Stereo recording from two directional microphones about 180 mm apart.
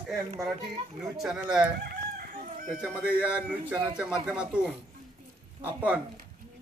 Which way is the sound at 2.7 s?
5° right (ahead or behind).